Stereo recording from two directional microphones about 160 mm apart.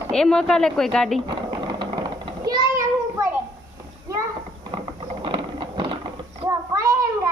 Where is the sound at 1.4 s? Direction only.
25° right (ahead or behind).